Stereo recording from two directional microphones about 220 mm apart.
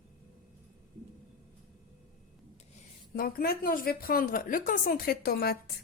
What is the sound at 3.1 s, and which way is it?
A woman's voice, 40° left (ahead or behind).